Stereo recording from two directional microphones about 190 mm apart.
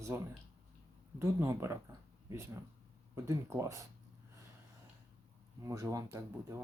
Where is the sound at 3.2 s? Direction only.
15° right (ahead or behind).